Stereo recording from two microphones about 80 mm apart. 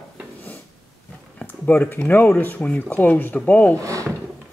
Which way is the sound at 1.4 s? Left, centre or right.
Left.